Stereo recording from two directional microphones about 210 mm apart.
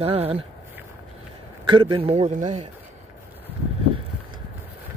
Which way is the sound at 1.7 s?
20° right (ahead or behind).